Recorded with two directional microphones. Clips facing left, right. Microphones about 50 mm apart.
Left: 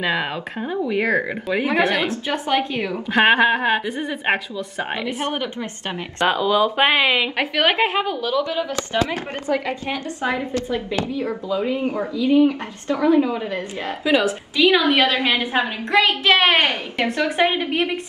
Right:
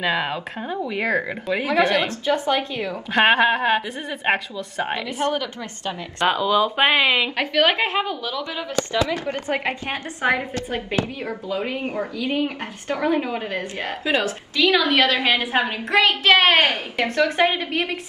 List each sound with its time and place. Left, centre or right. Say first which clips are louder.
0.0 s a woman's voice: even; centre
3.1 s speech: left 1 dB; centre
5.0 s a woman's voice: right 1 dB; left
6.1 s speech: left 1 dB; centre
8.7 s speech: right 5 dB; left
9.5 s a woman's voice: left 4 dB; right
12.2 s speech: left 9 dB; right
12.4 s a woman's voice: left 5 dB; right
14.1 s a woman's voice: left 4 dB; centre
16.3 s speech: right 2 dB; centre
17.0 s a woman's voice: even; centre
17.7 s speech: left 3 dB; centre